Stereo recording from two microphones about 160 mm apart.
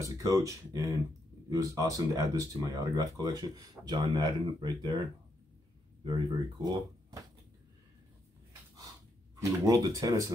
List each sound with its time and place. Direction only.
0.0 s speech: 20° right (ahead or behind)
6.0 s speech: 25° right (ahead or behind)
9.4 s speech: 20° right (ahead or behind)